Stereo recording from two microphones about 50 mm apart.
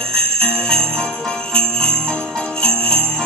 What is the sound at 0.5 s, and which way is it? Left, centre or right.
Jingle bell, centre.